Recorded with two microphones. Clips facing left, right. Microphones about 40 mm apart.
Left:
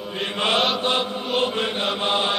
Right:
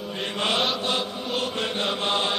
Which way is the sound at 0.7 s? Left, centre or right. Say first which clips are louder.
Left 4 dB; left.